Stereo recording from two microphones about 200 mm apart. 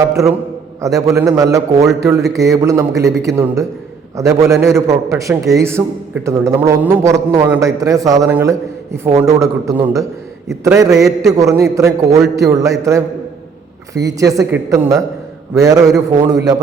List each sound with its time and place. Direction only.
0.8 s a man's voice: 15° right (ahead or behind)